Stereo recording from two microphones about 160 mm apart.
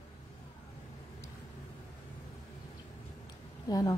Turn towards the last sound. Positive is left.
turn(degrees=25)  # may be behind; listen again after turning